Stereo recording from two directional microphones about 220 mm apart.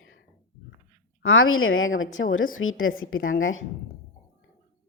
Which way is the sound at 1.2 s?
65° left (ahead or behind).